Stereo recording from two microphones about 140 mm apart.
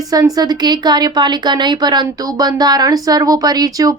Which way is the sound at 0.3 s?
30° right (ahead or behind).